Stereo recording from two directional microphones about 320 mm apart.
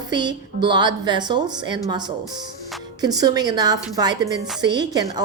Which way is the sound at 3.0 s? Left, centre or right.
Centre.